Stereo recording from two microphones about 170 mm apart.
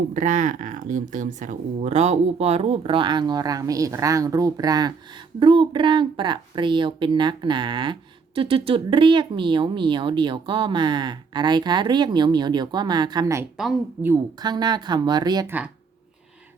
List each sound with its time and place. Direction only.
0.1 s speech: 45° right (ahead or behind); by 15.4 s 25° right (ahead or behind)
15.4 s speech: 10° right (ahead or behind)